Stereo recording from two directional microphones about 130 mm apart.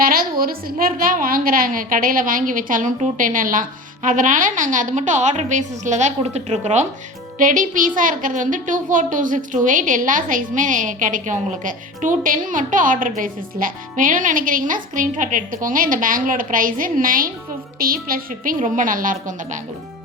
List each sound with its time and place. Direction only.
0.0 s a woman's voice: 90° right; by 6.8 s 60° right (ahead or behind)
7.3 s a woman's voice: 90° right